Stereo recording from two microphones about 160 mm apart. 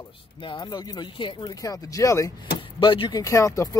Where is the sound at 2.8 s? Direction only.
30° left (ahead or behind).